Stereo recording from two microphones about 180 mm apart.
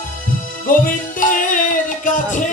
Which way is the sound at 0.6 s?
50° left (ahead or behind).